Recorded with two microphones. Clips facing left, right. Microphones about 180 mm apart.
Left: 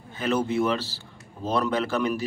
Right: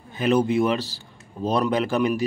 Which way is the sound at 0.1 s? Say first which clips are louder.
Right 5 dB; 15° right (ahead or behind).